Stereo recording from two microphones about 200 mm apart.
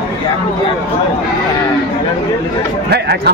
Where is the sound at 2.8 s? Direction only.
55° right (ahead or behind).